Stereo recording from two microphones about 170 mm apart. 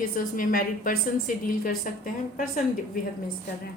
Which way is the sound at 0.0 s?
55° left (ahead or behind).